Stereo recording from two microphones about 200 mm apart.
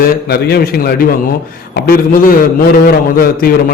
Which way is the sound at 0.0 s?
50° left (ahead or behind).